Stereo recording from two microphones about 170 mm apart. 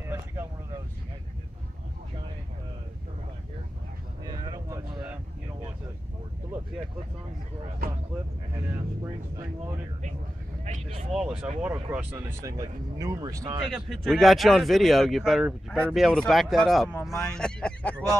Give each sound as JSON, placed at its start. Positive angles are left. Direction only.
{"t": 0.0, "sound": "vehicle", "side_deg": -15}
{"t": 4.2, "sound": "vehicle", "side_deg": -25}
{"t": 7.8, "sound": "speech", "side_deg": -60}
{"t": 10.6, "sound": "speech", "side_deg": -40}
{"t": 11.1, "sound": "speech", "side_deg": -5}
{"t": 13.7, "sound": "speech", "side_deg": 0}
{"t": 17.2, "sound": "a sound", "side_deg": 5}